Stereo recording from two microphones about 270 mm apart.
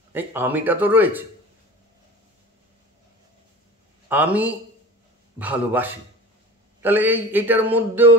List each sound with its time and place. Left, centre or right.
0.1 s a man's voice: centre
4.1 s a man's voice: centre